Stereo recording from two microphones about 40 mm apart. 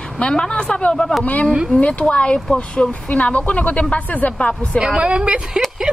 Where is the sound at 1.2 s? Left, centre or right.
Left.